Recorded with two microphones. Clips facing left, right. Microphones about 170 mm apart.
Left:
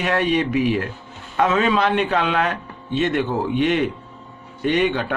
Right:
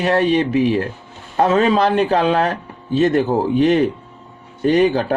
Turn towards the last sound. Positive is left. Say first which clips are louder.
# right 5 dB
turn(degrees=-35)  # may be behind; listen again after turning